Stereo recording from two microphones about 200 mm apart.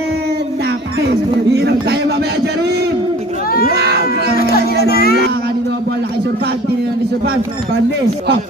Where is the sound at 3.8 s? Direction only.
55° right (ahead or behind).